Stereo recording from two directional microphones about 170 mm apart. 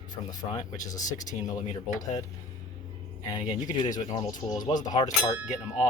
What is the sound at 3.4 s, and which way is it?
Speech, 25° left (ahead or behind).